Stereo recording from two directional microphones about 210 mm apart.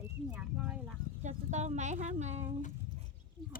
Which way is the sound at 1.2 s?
35° right (ahead or behind).